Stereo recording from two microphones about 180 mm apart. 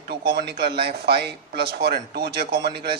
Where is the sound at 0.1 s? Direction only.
60° right (ahead or behind).